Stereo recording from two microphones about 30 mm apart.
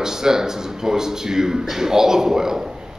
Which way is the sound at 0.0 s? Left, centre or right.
Centre.